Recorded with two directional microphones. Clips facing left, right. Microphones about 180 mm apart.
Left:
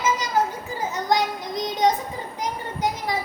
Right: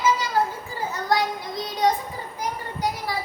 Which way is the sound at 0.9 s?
20° left (ahead or behind).